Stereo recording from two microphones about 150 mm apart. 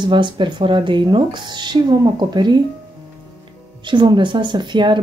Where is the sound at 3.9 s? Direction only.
30° right (ahead or behind).